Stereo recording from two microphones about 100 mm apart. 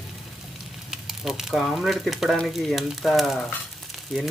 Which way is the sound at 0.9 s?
5° right (ahead or behind).